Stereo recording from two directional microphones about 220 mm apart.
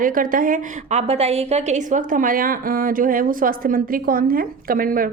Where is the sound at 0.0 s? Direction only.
40° right (ahead or behind).